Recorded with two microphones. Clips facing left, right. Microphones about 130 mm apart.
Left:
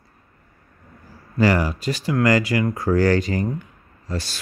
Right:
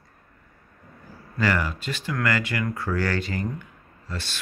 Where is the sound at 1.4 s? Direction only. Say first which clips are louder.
Left 6 dB; 35° left (ahead or behind).